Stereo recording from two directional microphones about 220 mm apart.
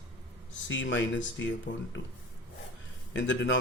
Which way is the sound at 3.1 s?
55° left (ahead or behind).